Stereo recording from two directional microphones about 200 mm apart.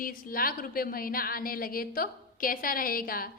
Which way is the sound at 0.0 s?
45° left (ahead or behind).